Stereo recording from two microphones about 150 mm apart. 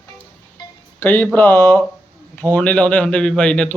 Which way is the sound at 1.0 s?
10° left (ahead or behind).